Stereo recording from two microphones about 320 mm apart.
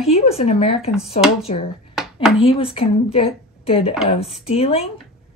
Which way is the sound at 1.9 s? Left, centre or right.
Centre.